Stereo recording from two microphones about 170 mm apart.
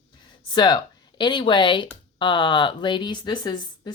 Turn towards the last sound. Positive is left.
turn(degrees=25)  # may be behind; listen again after turning